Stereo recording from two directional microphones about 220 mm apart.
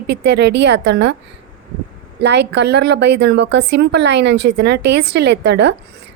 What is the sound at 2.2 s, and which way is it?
A woman's voice, 50° right (ahead or behind).